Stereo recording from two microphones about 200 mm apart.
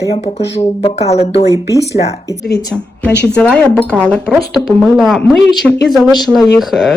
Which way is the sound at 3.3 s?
5° left (ahead or behind).